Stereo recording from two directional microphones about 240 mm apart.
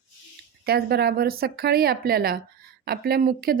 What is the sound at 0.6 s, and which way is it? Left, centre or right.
Speech, right.